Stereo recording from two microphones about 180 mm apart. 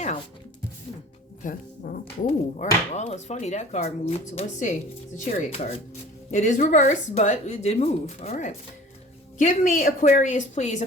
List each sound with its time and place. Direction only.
1.5 s a woman's voice: 50° left (ahead or behind)